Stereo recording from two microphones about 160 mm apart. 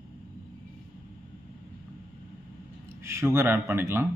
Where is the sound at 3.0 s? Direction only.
15° right (ahead or behind).